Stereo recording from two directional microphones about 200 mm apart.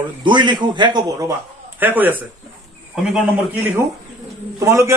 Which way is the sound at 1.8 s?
10° right (ahead or behind).